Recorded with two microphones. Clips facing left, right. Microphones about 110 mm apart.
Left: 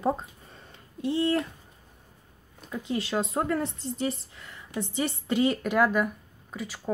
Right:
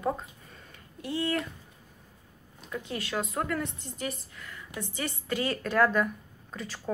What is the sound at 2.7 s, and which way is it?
A woman's voice, 25° left (ahead or behind).